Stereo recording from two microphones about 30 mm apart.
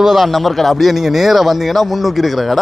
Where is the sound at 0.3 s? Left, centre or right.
Centre.